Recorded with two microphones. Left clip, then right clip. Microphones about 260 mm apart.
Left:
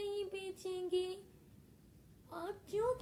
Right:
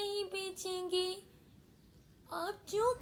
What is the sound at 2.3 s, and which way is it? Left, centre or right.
Child singing, right.